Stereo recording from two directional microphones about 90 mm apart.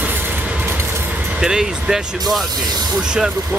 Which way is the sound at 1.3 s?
5° right (ahead or behind).